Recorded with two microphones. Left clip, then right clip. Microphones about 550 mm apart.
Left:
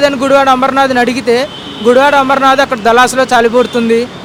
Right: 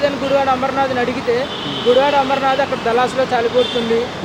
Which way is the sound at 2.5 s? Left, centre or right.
Left.